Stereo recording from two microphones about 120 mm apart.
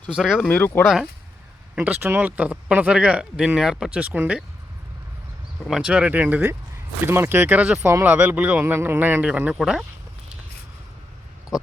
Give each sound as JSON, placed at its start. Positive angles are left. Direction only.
{"t": 0.3, "sound": "speech", "side_deg": 15}
{"t": 1.7, "sound": "speech", "side_deg": -10}
{"t": 5.6, "sound": "speech", "side_deg": -5}